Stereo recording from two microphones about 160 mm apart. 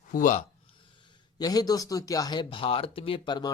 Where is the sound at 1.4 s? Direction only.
25° left (ahead or behind).